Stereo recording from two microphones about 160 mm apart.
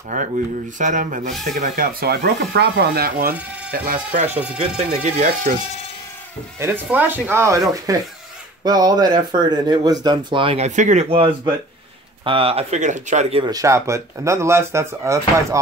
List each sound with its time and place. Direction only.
0.1 s speech: 50° right (ahead or behind); by 4.2 s 65° right (ahead or behind)
4.6 s speech: 40° right (ahead or behind)
6.6 s speech: 10° right (ahead or behind); by 10.7 s 35° right (ahead or behind)
10.8 s speech: 50° right (ahead or behind)
11.1 s speech: 35° right (ahead or behind)
13.4 s speech: 20° right (ahead or behind)